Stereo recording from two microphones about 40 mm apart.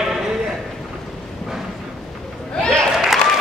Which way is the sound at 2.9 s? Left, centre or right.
Centre.